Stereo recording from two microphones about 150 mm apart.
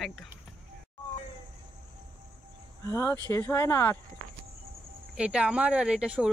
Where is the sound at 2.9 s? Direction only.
20° left (ahead or behind).